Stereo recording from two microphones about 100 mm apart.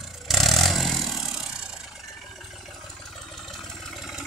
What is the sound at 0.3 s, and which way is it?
Vehicle, centre (ahead or behind).